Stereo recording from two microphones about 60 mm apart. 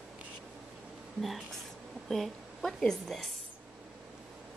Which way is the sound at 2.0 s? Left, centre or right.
Centre.